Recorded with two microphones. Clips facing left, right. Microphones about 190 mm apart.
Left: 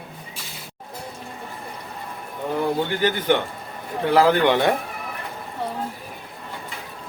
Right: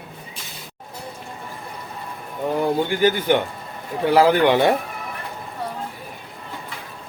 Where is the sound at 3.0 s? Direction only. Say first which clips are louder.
Right 3 dB; 10° right (ahead or behind).